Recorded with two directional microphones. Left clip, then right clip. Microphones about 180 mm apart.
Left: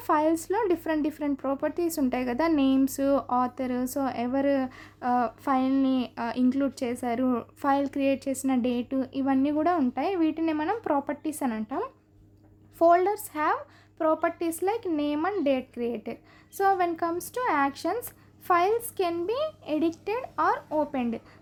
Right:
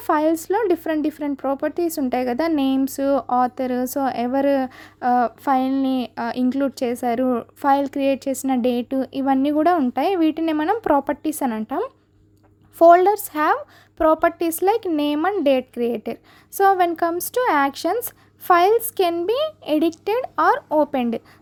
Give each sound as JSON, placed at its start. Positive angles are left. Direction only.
{"t": 0.0, "sound": "speech", "side_deg": -30}